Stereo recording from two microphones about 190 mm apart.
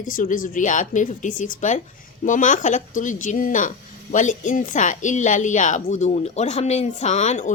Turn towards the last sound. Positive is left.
turn(degrees=35)  # may be behind; listen again after turning